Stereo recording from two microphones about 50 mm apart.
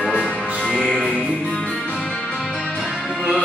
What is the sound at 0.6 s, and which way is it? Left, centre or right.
Music, centre.